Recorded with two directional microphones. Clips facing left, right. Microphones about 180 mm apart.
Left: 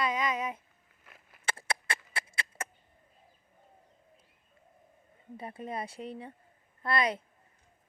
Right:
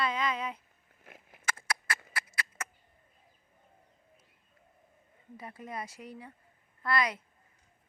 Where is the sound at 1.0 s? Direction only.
50° right (ahead or behind).